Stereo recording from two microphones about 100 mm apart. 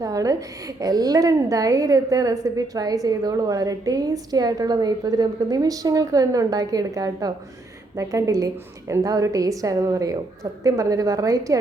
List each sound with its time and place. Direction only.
0.0 s a woman's voice: 35° right (ahead or behind)